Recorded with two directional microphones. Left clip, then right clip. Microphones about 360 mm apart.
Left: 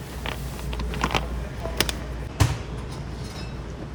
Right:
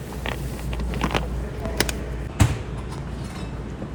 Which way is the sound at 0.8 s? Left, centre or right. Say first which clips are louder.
Even; centre.